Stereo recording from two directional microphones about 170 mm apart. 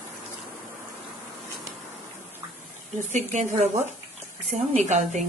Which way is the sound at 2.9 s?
45° right (ahead or behind).